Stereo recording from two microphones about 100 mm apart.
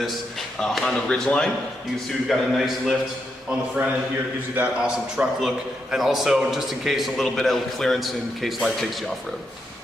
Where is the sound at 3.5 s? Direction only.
15° right (ahead or behind).